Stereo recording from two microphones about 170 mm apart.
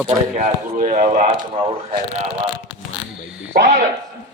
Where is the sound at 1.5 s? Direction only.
30° right (ahead or behind).